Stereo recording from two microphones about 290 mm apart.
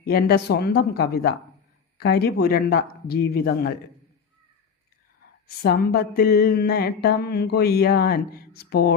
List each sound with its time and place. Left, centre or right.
0.0 s speech: left
5.5 s speech: left